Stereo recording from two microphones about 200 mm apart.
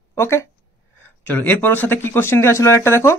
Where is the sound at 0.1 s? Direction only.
15° left (ahead or behind).